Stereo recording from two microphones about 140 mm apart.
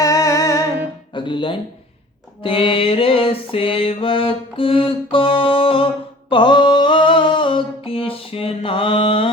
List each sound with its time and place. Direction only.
0.0 s music: 25° left (ahead or behind)
1.1 s speech: 35° left (ahead or behind)
2.4 s mantra: 40° left (ahead or behind)
6.3 s a sound: 35° left (ahead or behind)